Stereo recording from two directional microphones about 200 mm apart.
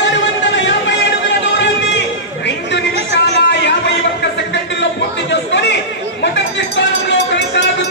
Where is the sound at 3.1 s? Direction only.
60° left (ahead or behind).